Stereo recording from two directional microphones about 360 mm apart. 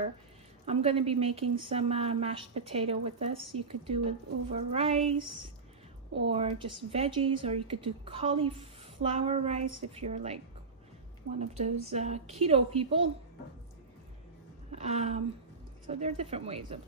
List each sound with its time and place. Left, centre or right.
0.7 s speech: centre
6.2 s speech: centre
11.9 s speech: centre
14.7 s speech: centre